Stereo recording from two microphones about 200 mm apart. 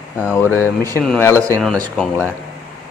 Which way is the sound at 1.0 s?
5° left (ahead or behind).